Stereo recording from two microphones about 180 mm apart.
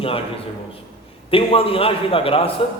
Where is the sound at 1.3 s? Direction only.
30° left (ahead or behind).